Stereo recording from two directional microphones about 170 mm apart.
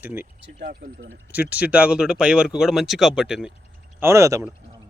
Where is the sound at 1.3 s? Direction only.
10° right (ahead or behind).